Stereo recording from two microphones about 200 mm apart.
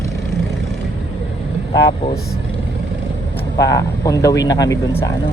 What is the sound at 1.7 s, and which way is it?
Speech, 20° left (ahead or behind).